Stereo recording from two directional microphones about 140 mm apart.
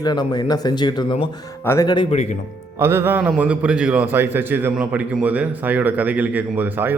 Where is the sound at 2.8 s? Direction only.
15° right (ahead or behind).